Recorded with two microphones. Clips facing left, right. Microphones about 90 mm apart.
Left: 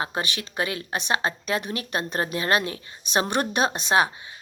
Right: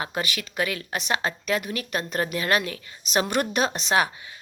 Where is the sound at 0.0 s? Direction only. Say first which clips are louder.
Left 1 dB; 25° left (ahead or behind).